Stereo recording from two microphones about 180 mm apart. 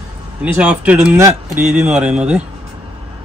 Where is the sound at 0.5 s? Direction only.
5° right (ahead or behind).